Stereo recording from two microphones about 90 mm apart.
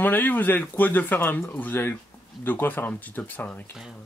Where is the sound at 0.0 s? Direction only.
20° left (ahead or behind).